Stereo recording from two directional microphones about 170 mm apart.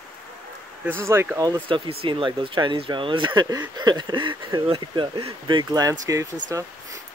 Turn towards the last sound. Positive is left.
turn(degrees=-20)  # may be behind; listen again after turning